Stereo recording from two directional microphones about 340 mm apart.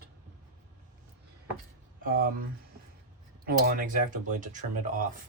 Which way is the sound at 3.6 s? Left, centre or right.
Right.